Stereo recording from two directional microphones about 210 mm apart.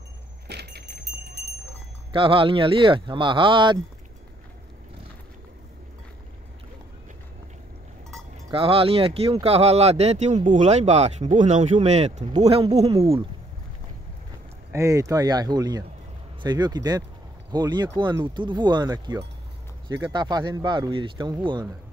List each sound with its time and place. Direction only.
0.5 s vehicle: 50° right (ahead or behind)
2.1 s speech: 25° right (ahead or behind)
8.5 s speech: 25° right (ahead or behind)
14.7 s speech: 15° right (ahead or behind)